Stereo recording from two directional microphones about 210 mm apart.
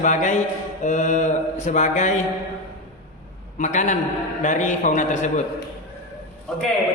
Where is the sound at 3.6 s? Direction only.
35° left (ahead or behind).